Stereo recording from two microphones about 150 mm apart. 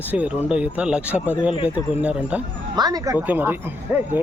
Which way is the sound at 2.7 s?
25° right (ahead or behind).